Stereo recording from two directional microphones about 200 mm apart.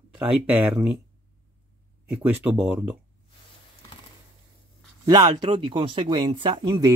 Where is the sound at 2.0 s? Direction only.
10° right (ahead or behind).